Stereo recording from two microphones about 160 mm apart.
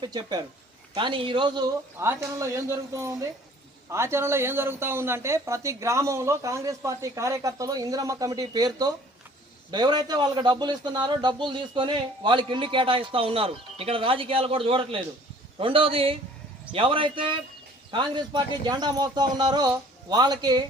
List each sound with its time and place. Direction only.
0.0 s speech: 25° right (ahead or behind)
2.0 s speech: 15° right (ahead or behind)